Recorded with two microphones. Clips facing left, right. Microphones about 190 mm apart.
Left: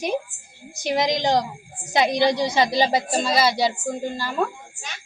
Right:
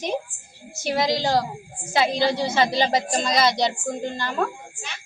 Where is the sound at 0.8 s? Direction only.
15° left (ahead or behind).